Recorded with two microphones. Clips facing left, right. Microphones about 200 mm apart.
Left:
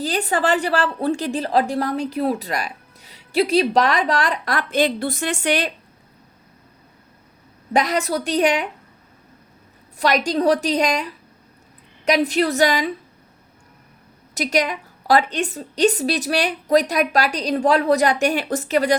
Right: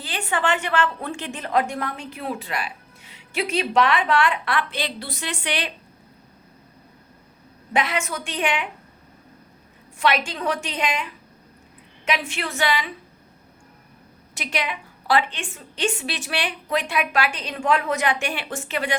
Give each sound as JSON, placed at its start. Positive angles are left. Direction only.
{"t": 0.0, "sound": "a woman's voice", "side_deg": 40}
{"t": 7.7, "sound": "a woman's voice", "side_deg": 40}
{"t": 10.0, "sound": "a woman's voice", "side_deg": 40}
{"t": 14.3, "sound": "a woman's voice", "side_deg": 40}